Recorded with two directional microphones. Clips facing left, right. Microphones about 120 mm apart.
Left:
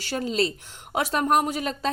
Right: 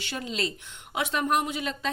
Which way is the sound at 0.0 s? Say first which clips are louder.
Left 6 dB; 40° left (ahead or behind).